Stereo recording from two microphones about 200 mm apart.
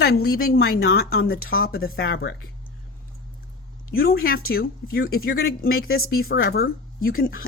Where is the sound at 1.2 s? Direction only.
50° left (ahead or behind).